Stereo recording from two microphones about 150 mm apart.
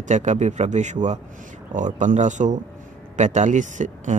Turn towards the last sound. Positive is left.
turn(degrees=-55)  # may be behind; listen again after turning